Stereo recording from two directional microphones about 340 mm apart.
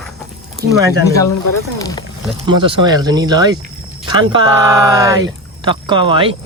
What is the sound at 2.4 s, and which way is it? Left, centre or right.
Speech, centre.